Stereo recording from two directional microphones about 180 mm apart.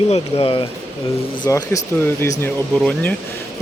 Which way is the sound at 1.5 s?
15° left (ahead or behind).